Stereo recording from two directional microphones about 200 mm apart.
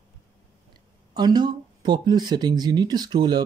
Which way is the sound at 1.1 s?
20° right (ahead or behind).